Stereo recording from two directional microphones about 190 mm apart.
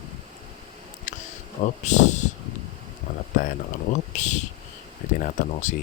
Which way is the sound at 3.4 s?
40° left (ahead or behind).